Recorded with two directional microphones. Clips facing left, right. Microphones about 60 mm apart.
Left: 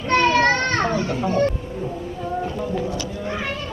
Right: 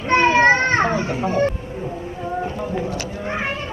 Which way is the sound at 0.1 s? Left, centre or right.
Right.